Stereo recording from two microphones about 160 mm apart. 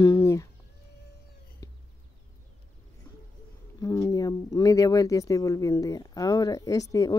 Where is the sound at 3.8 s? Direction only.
20° left (ahead or behind).